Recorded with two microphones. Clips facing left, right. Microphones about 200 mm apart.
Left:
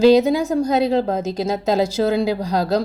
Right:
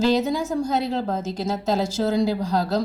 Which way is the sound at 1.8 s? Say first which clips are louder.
Left 3 dB; 65° left (ahead or behind).